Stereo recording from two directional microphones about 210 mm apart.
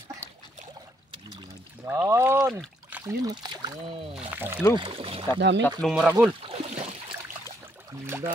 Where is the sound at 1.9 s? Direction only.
10° right (ahead or behind).